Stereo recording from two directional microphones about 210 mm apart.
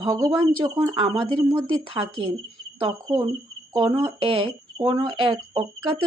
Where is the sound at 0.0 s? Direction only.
20° right (ahead or behind).